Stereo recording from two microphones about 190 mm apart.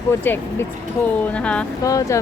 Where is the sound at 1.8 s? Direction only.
15° left (ahead or behind).